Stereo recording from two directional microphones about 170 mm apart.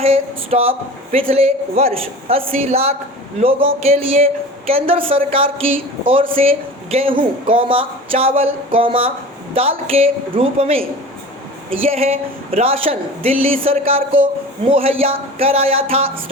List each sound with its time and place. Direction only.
0.0 s speech: 35° right (ahead or behind)